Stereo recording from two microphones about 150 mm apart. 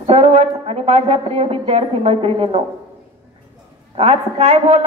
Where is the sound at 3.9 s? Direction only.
45° right (ahead or behind).